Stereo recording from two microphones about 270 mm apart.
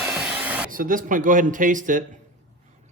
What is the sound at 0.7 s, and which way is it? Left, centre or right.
A man's voice, right.